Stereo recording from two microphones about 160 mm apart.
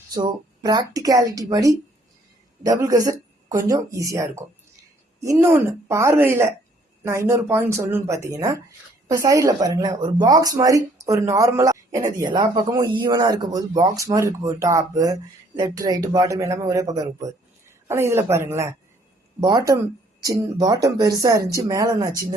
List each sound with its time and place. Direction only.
0.1 s a woman's voice: 25° right (ahead or behind)